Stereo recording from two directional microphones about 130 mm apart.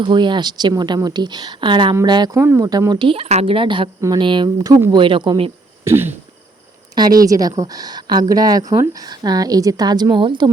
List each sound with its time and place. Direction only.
0.0 s a woman's voice: 35° right (ahead or behind)
2.3 s a woman's voice: 20° right (ahead or behind); by 5.5 s 40° right (ahead or behind)
5.8 s throat clearing: 20° right (ahead or behind)
6.9 s a woman's voice: 30° right (ahead or behind)